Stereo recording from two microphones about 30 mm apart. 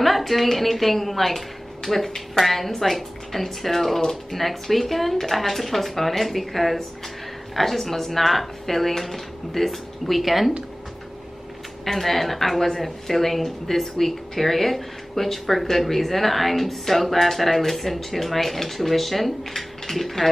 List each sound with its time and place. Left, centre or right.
0.0 s speech: centre
4.0 s speech: centre
4.4 s speech: centre
11.8 s speech: centre